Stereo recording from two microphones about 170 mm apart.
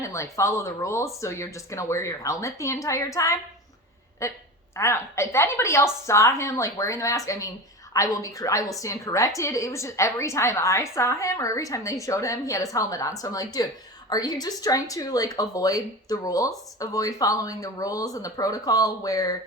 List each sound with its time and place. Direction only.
0.0 s a woman's voice: 15° left (ahead or behind)